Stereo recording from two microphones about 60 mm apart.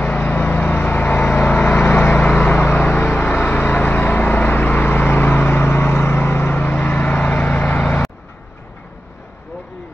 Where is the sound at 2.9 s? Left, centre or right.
Left.